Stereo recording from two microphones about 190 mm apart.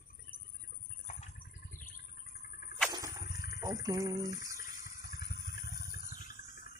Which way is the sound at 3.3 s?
55° left (ahead or behind).